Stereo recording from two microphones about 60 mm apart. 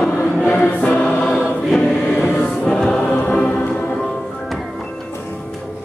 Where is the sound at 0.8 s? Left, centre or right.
Left.